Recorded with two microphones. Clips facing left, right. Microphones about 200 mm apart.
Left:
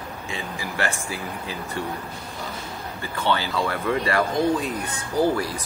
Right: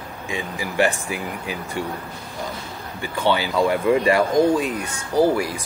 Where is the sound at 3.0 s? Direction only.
10° right (ahead or behind).